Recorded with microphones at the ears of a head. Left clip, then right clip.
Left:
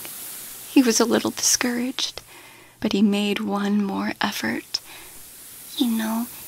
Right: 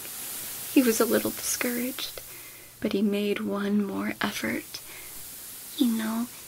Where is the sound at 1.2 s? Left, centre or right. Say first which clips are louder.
Left 8 dB; left.